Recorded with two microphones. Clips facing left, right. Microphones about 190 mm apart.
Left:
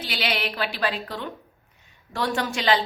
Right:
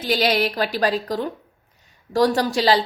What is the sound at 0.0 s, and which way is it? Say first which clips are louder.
A woman's voice: right 8 dB; 40° right (ahead or behind).